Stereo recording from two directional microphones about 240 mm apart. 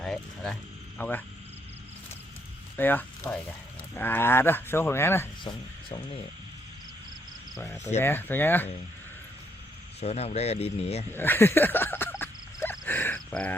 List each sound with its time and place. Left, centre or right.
0.0 s speech: centre
2.7 s speech: centre
8.0 s speech: centre
10.0 s speech: left
11.1 s speech: centre
12.2 s a sound: centre
12.8 s cricket: centre